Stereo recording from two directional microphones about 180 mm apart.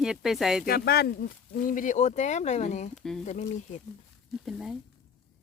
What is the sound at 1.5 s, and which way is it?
Speech, 50° left (ahead or behind).